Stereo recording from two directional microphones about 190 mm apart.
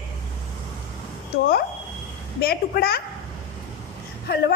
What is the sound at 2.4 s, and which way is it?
Speech, 55° left (ahead or behind).